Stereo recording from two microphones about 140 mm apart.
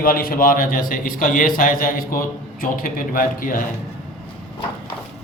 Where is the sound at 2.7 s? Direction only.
80° left.